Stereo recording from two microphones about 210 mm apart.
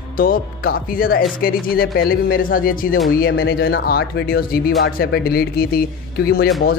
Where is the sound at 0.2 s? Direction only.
40° left (ahead or behind).